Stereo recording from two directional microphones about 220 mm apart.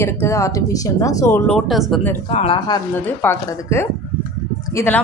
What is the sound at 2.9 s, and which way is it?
A woman's voice, 10° left (ahead or behind).